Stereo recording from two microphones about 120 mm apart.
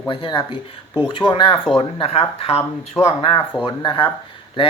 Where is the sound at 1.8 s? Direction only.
55° left (ahead or behind).